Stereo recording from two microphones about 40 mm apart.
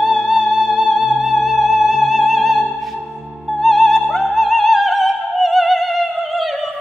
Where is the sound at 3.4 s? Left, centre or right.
Centre.